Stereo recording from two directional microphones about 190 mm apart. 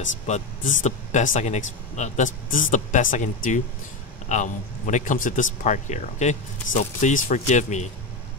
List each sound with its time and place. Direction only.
0.3 s a man's voice: 40° left (ahead or behind)
4.3 s a man's voice: 40° left (ahead or behind)